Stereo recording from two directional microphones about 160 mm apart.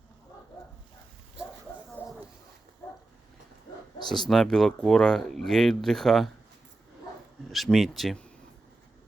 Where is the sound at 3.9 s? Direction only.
25° left (ahead or behind).